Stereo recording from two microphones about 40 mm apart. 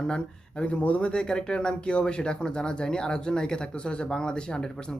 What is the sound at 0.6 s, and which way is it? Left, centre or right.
Speech, left.